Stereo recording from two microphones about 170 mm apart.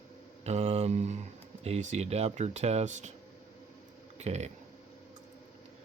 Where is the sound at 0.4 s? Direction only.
40° right (ahead or behind).